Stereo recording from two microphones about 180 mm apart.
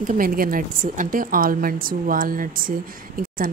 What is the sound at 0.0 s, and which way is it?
A woman's voice, 50° right (ahead or behind).